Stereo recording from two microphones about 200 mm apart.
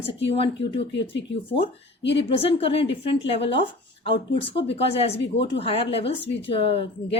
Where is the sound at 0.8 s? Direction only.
60° left (ahead or behind).